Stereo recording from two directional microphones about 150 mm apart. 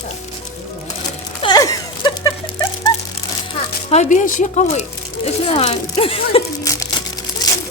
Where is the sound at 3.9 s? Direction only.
50° left (ahead or behind).